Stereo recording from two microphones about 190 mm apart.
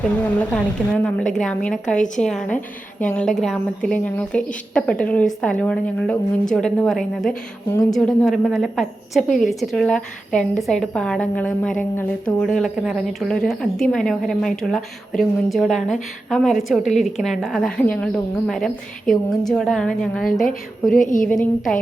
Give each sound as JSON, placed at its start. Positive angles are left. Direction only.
{"t": 0.2, "sound": "speech", "side_deg": 5}
{"t": 7.7, "sound": "speech", "side_deg": 20}
{"t": 7.9, "sound": "speech", "side_deg": 0}
{"t": 20.9, "sound": "a woman's voice", "side_deg": 45}
{"t": 21.2, "sound": "speech", "side_deg": 5}